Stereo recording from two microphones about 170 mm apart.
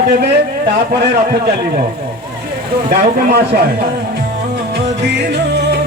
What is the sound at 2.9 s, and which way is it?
Speech, 75° right (ahead or behind).